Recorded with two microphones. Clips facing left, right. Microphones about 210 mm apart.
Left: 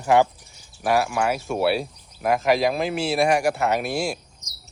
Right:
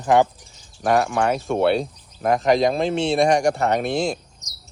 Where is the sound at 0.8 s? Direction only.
5° left (ahead or behind).